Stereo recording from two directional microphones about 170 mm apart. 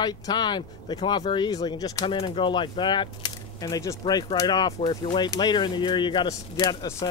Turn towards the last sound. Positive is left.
turn(degrees=20)  # may be behind; listen again after turning